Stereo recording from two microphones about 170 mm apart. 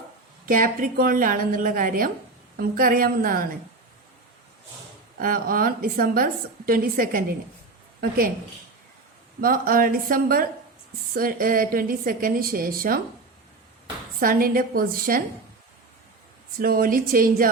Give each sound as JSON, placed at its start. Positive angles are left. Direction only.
{"t": 0.4, "sound": "a woman's voice", "side_deg": -55}
{"t": 5.2, "sound": "a woman's voice", "side_deg": -55}
{"t": 9.4, "sound": "a woman's voice", "side_deg": -55}
{"t": 14.2, "sound": "a woman's voice", "side_deg": -55}
{"t": 16.6, "sound": "a woman's voice", "side_deg": -55}